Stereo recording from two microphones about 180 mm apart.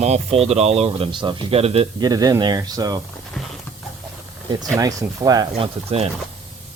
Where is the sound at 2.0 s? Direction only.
20° right (ahead or behind).